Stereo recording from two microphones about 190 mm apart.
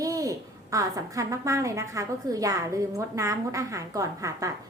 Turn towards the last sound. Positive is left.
turn(degrees=-15)  # may be behind; listen again after turning